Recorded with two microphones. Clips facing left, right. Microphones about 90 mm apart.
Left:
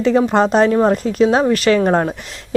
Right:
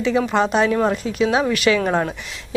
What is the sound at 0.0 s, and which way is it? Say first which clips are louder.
A woman's voice: left 5 dB; 40° left (ahead or behind).